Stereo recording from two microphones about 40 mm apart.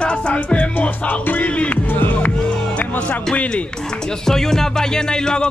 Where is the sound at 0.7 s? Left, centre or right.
Left.